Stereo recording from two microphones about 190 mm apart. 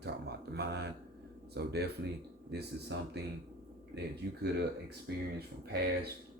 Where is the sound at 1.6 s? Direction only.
60° right (ahead or behind).